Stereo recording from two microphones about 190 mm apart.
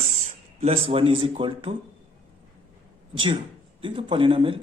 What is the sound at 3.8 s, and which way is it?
Speech, 25° right (ahead or behind).